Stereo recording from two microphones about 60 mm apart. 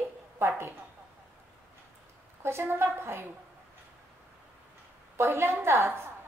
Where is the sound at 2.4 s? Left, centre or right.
Right.